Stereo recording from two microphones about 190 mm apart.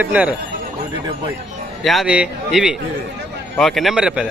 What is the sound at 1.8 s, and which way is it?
A man's voice, centre (ahead or behind).